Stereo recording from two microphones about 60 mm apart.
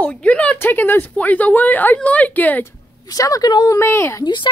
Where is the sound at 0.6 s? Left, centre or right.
Left.